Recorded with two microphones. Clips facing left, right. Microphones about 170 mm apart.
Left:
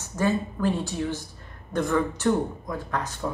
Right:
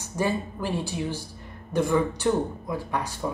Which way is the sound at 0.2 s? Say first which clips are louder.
Left 3 dB; 10° right (ahead or behind).